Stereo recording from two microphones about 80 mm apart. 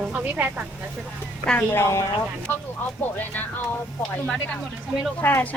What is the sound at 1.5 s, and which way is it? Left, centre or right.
Speech, left.